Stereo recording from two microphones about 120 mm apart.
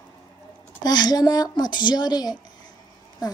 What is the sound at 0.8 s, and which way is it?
Speech, 35° left (ahead or behind).